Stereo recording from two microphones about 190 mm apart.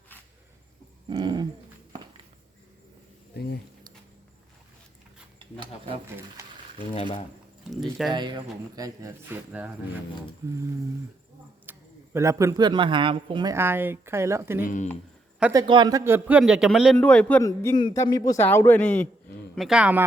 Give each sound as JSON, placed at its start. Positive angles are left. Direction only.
{"t": 1.0, "sound": "owl", "side_deg": -25}
{"t": 5.5, "sound": "speech", "side_deg": -30}
{"t": 6.9, "sound": "speech", "side_deg": 30}
{"t": 7.7, "sound": "speech", "side_deg": 0}
{"t": 8.1, "sound": "speech", "side_deg": -25}
{"t": 11.6, "sound": "speech", "side_deg": -10}
{"t": 14.6, "sound": "speech", "side_deg": 40}
{"t": 15.5, "sound": "a man's voice", "side_deg": -25}
{"t": 19.5, "sound": "speech", "side_deg": -5}